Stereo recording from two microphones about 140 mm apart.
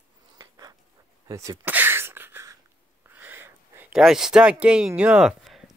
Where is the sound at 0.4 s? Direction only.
25° right (ahead or behind).